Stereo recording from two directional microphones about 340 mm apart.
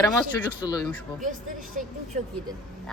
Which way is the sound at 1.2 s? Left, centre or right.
Right.